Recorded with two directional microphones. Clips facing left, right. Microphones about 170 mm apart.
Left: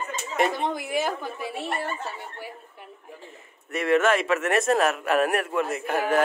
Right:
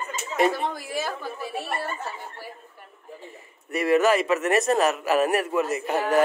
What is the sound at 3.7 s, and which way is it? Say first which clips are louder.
Speech: right 1 dB; 5° right (ahead or behind).